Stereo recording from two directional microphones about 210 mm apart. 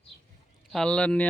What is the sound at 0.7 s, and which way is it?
Speech, 5° left (ahead or behind).